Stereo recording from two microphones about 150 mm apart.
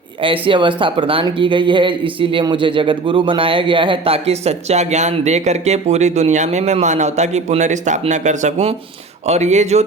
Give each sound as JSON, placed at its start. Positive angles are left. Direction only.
{"t": 0.2, "sound": "speech", "side_deg": -35}